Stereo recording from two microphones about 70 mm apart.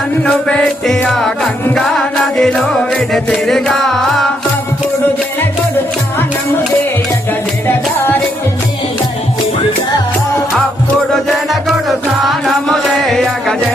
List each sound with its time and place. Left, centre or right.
0.3 s music: centre
7.7 s music: left
11.9 s music: centre